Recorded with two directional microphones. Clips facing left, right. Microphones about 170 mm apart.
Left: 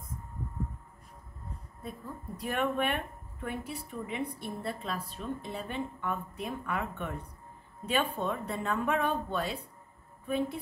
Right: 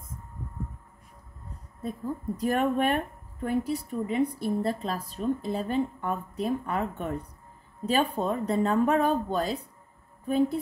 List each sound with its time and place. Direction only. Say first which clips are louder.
1.8 s a woman's voice: right 10 dB; 40° right (ahead or behind)